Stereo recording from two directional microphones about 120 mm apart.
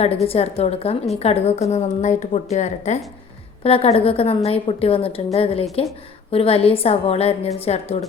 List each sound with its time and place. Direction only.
0.0 s a woman's voice: 55° left (ahead or behind); by 3.0 s 75° left (ahead or behind)
3.6 s a woman's voice: 55° left (ahead or behind)